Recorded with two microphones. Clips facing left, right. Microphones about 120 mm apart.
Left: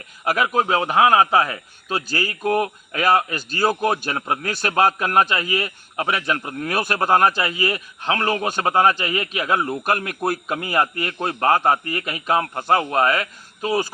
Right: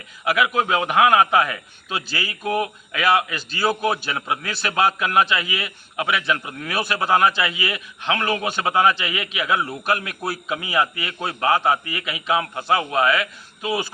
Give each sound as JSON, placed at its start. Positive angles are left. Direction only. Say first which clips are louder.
{"t": 0.3, "sound": "a man's voice", "louder": "left 1 dB", "side_deg": 40}